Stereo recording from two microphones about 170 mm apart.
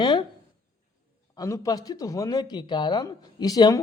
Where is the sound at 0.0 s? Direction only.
30° left (ahead or behind).